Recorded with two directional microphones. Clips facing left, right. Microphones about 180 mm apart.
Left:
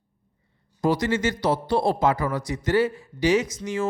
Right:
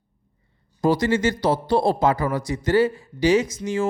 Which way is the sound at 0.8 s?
30° right (ahead or behind).